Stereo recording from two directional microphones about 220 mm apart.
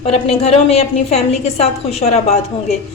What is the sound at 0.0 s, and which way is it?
A woman's voice, 30° left (ahead or behind).